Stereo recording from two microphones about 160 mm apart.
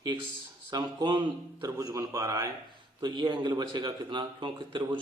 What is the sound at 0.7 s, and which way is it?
Speech, 25° right (ahead or behind).